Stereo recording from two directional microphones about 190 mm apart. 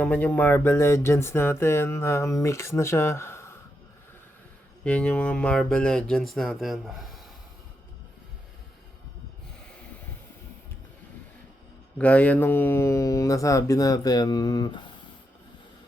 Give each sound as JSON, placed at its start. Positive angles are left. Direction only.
{"t": 0.0, "sound": "music", "side_deg": 10}
{"t": 4.8, "sound": "speech", "side_deg": 5}
{"t": 11.9, "sound": "music", "side_deg": 5}